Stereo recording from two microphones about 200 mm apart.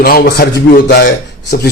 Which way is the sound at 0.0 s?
50° left (ahead or behind).